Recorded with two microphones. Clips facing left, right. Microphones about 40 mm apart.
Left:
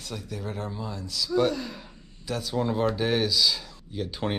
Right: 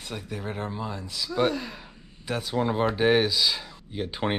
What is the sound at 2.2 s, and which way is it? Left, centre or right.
Speech, right.